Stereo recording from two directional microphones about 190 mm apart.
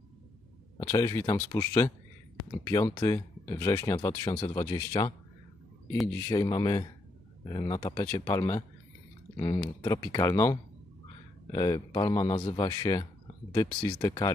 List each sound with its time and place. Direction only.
0.7 s speech: 15° left (ahead or behind)
6.2 s speech: 20° left (ahead or behind)